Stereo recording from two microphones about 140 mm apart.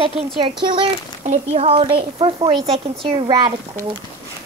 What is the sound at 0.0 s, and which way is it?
A child's voice, 45° right (ahead or behind).